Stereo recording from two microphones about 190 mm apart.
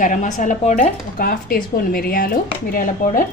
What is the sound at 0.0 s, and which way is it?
Speech, 45° left (ahead or behind).